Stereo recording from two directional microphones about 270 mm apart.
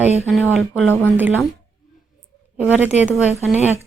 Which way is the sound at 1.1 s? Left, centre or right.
Centre.